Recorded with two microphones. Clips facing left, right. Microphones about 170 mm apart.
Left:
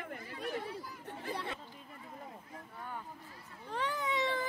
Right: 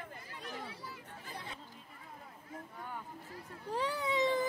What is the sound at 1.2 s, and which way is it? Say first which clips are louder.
Speech: left 8 dB; 70° left (ahead or behind).